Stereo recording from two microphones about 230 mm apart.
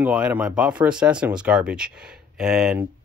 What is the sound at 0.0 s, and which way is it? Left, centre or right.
Speech, centre.